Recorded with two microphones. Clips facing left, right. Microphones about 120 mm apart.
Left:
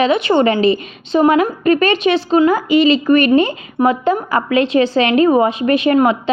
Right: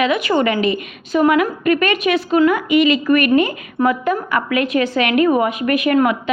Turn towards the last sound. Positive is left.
turn(degrees=25)  # may be behind; listen again after turning